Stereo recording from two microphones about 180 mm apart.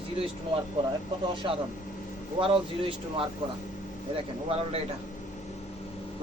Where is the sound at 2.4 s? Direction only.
30° right (ahead or behind).